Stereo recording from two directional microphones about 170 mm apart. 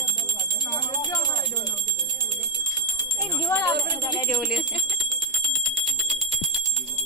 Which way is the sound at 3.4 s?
20° left (ahead or behind).